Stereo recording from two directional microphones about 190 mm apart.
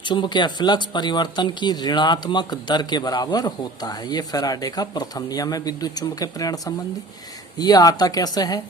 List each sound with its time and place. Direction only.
0.0 s speech: 25° left (ahead or behind)